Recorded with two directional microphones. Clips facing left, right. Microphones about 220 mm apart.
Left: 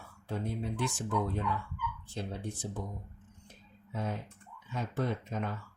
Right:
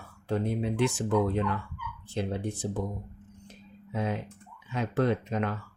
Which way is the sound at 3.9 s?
80° right.